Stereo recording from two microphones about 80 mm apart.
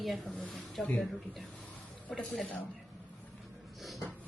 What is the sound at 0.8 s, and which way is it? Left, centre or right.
Speech, centre.